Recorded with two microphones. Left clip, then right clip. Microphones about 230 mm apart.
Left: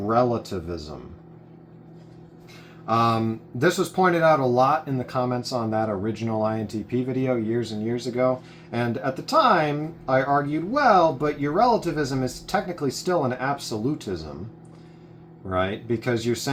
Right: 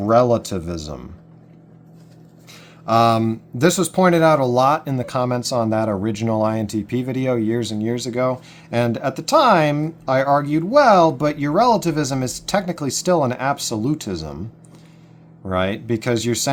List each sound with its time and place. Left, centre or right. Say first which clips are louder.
0.0 s speech: right 7 dB; right
2.8 s speech: right 6 dB; right
15.4 s speech: right 4 dB; right